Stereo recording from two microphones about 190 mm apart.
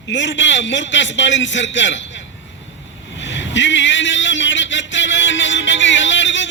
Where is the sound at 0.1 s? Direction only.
75° left (ahead or behind).